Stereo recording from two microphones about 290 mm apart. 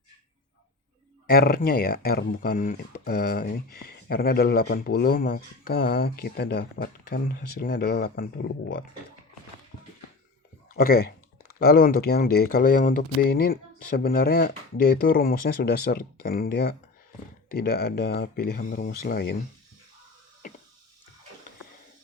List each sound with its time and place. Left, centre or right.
1.3 s speech: left
10.8 s speech: left
20.4 s a sound: left